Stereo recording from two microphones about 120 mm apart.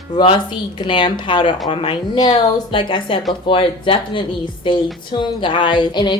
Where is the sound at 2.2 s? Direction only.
35° left (ahead or behind).